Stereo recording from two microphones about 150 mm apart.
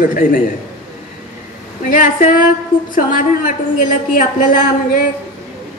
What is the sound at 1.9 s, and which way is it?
A woman's voice, 60° left (ahead or behind).